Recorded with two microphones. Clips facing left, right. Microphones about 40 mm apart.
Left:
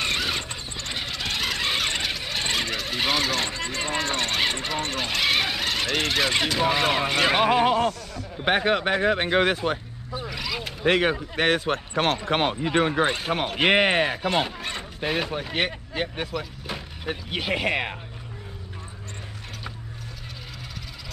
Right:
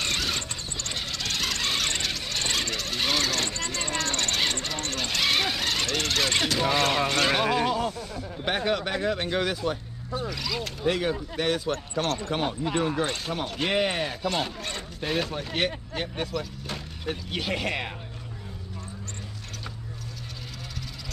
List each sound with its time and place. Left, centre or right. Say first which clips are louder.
0.0 s squeal: left 3 dB; centre; by 7.9 s left
8.5 s speech: left 5 dB; left
10.1 s vehicle: even; centre
10.9 s speech: left 5 dB; left
13.0 s speech: left 5 dB; left
13.3 s speech: left 6 dB; left